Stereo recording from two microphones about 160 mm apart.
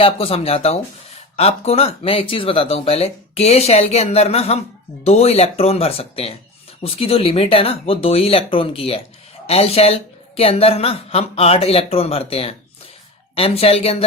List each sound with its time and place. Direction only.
0.0 s speech: 40° left (ahead or behind)